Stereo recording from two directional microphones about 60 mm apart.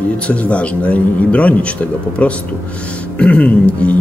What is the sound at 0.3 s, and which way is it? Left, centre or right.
Speech, left.